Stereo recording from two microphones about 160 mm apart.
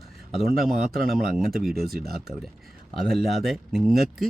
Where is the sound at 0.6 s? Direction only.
65° right (ahead or behind).